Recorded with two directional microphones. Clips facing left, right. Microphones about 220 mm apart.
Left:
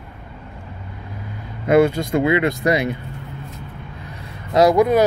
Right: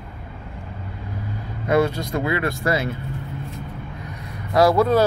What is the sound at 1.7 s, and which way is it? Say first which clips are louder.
Speech: left 5 dB; 25° left (ahead or behind).